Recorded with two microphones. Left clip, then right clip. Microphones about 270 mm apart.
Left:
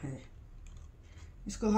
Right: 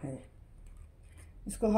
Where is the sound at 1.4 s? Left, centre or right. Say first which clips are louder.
Right 3 dB; centre.